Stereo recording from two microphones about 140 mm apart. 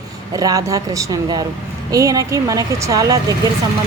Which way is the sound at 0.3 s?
25° right (ahead or behind).